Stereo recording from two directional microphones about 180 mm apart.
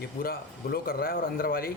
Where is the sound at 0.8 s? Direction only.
55° left (ahead or behind).